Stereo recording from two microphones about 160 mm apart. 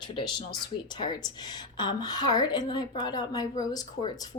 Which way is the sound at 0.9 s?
25° left (ahead or behind).